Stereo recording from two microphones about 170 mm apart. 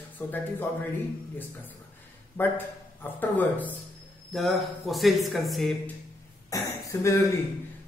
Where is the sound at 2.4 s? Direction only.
10° left (ahead or behind).